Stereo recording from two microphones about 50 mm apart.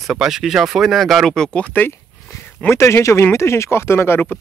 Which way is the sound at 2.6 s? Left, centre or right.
Left.